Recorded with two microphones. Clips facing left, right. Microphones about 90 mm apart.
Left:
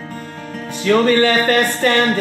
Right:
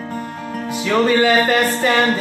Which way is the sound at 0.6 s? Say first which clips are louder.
Left 3 dB; 10° right (ahead or behind).